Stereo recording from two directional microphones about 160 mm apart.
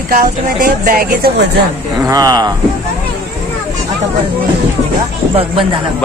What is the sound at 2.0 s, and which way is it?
Speech, 25° right (ahead or behind).